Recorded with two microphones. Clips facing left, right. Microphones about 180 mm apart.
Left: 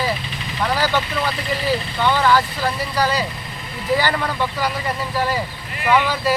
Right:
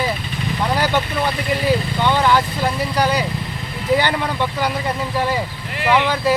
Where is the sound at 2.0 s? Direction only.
20° right (ahead or behind).